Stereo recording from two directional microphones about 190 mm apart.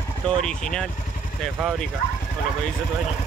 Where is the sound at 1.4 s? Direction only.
Centre (ahead or behind).